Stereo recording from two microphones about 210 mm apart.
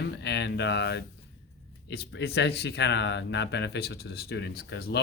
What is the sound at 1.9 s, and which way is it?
Speech, 50° left (ahead or behind).